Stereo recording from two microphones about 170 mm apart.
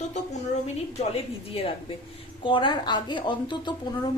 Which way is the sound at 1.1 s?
35° left (ahead or behind).